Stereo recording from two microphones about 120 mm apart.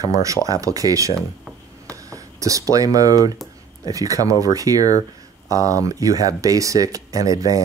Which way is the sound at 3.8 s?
30° right (ahead or behind).